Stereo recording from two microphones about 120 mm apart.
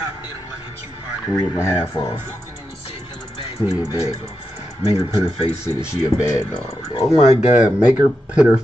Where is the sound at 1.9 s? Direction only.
40° left (ahead or behind).